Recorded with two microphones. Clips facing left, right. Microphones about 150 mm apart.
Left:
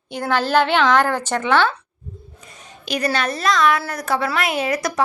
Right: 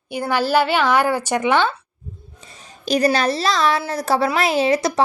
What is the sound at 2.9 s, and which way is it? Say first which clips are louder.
A woman's voice: right 5 dB; 35° right (ahead or behind).